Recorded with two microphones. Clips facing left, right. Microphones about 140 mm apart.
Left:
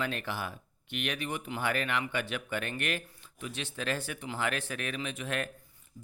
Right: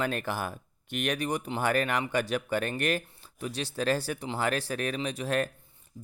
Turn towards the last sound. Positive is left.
turn(degrees=-35)  # may be behind; listen again after turning